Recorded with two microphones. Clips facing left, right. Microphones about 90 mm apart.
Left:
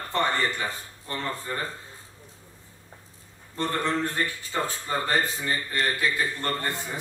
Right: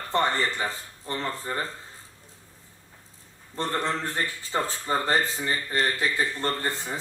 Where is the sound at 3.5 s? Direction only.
25° right (ahead or behind).